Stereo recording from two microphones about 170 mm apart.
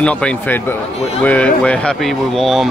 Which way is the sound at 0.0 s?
5° left (ahead or behind).